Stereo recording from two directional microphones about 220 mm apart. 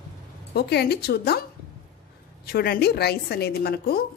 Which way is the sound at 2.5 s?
45° left (ahead or behind).